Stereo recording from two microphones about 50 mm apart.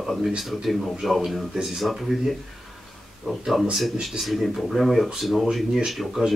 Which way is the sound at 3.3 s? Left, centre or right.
Centre.